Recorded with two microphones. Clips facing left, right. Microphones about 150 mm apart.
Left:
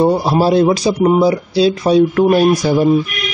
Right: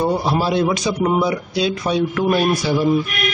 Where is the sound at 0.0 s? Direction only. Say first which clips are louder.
Left 6 dB; 40° left (ahead or behind).